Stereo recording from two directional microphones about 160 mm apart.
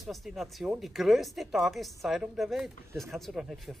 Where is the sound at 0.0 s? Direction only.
Centre (ahead or behind).